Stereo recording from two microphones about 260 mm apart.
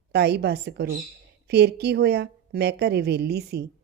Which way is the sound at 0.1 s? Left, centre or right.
Right.